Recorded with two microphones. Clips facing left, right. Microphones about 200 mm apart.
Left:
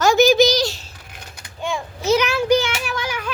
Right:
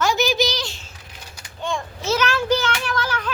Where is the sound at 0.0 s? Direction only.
45° left (ahead or behind).